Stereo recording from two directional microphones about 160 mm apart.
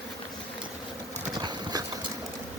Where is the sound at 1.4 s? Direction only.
25° right (ahead or behind).